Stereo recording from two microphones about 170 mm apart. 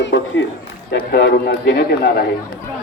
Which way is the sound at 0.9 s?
70° left (ahead or behind).